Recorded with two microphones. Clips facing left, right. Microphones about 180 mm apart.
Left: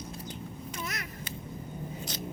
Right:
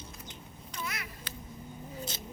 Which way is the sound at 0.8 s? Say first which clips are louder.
Right 1 dB; 40° left (ahead or behind).